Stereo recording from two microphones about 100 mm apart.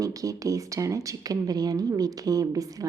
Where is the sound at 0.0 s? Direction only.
35° right (ahead or behind).